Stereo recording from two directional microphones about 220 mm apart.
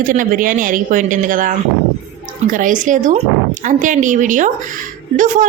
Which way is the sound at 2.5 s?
35° right (ahead or behind).